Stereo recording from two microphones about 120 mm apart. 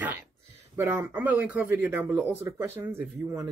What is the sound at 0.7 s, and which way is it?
Speech, 20° right (ahead or behind).